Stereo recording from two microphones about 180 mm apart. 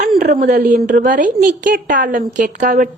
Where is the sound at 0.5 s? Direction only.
55° right (ahead or behind).